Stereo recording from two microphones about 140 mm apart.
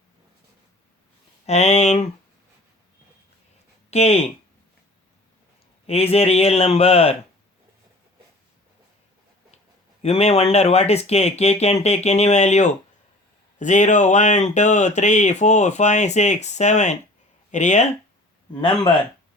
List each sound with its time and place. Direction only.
1.5 s speech: 50° left (ahead or behind)
3.9 s speech: 50° left (ahead or behind)
5.8 s speech: 45° left (ahead or behind)
10.0 s speech: 50° left (ahead or behind)
18.5 s speech: 30° left (ahead or behind)